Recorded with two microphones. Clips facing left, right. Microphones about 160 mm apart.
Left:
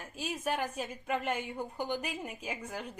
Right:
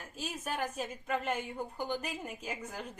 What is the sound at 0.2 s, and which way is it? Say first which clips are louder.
A woman's voice: left 3 dB; 10° left (ahead or behind).